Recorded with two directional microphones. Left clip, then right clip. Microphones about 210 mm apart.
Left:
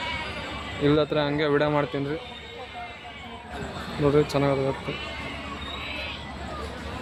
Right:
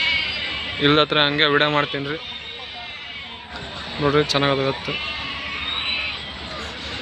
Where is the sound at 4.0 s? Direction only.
5° left (ahead or behind).